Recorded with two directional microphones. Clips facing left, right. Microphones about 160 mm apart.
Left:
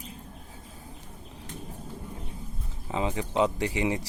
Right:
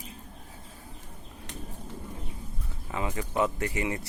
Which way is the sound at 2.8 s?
20° left (ahead or behind).